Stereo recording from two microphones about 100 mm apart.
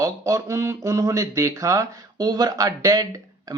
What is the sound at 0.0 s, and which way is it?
Speech, 30° right (ahead or behind).